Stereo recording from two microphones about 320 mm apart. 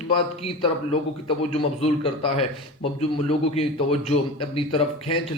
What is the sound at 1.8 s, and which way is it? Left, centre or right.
A man's voice, centre.